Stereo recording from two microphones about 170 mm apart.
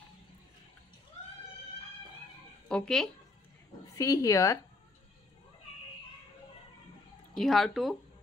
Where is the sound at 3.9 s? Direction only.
20° left (ahead or behind).